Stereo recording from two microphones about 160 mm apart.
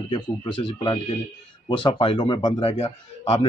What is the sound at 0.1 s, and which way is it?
A man's voice, 30° left (ahead or behind).